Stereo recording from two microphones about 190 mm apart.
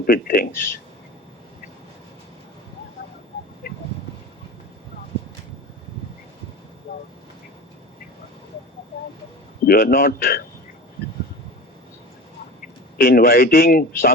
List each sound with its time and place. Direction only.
0.0 s speech: 50° left (ahead or behind)
9.6 s speech: 50° left (ahead or behind)
13.0 s speech: 50° left (ahead or behind)